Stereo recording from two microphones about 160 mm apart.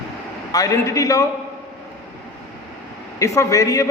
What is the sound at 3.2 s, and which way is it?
Speech, 20° left (ahead or behind).